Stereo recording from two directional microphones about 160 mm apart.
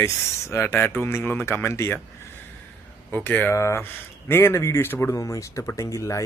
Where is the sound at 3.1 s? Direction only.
10° left (ahead or behind).